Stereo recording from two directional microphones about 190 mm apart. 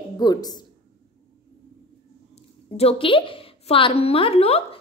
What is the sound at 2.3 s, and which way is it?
A woman's voice, 30° left (ahead or behind).